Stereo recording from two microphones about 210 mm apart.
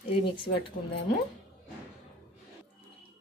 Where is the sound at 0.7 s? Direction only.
40° left (ahead or behind).